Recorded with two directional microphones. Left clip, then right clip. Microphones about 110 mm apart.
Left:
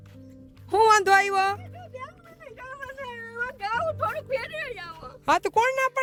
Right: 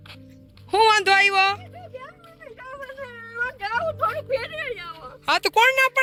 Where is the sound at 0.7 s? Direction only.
45° left (ahead or behind).